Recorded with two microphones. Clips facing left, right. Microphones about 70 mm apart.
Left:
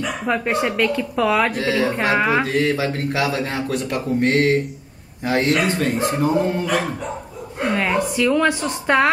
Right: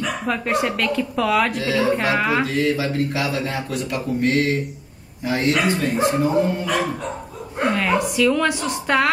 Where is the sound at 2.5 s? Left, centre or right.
Left.